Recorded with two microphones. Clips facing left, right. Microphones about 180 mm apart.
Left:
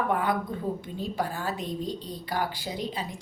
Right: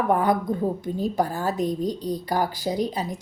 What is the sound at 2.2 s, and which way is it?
Speech, 40° right (ahead or behind).